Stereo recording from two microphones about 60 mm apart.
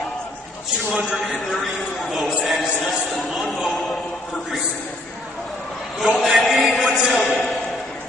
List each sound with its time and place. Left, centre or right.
0.9 s a man's voice: centre
6.0 s a man's voice: centre